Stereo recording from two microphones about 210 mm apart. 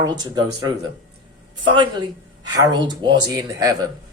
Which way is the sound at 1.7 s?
20° right (ahead or behind).